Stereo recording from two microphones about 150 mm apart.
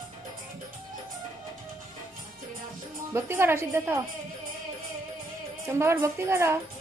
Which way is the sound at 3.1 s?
15° right (ahead or behind).